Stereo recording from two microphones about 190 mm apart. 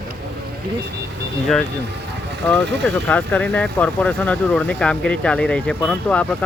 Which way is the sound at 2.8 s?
5° left (ahead or behind).